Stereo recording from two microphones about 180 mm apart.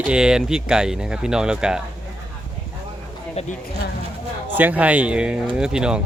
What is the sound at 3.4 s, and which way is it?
Speech, 35° left (ahead or behind).